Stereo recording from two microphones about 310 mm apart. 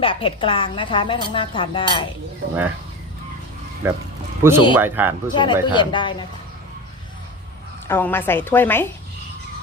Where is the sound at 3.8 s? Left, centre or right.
Centre.